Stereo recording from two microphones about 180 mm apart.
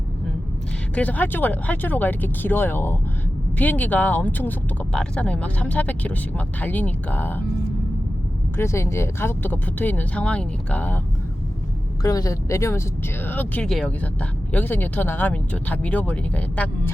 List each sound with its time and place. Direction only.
0.9 s speech: 10° left (ahead or behind)
8.5 s speech: 15° left (ahead or behind)
12.0 s speech: 20° left (ahead or behind)